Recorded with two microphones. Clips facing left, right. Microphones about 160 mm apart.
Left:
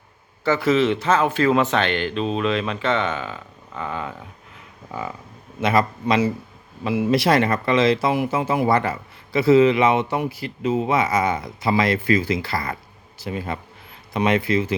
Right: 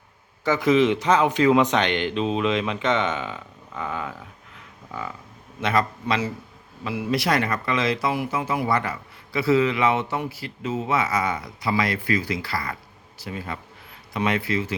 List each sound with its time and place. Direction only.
0.4 s speech: 15° right (ahead or behind)
3.8 s speech: 5° right (ahead or behind)
4.9 s a man's voice: 15° left (ahead or behind)
6.8 s speech: 20° left (ahead or behind)